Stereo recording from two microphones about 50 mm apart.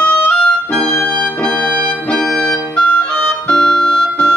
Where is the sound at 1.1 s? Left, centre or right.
Centre.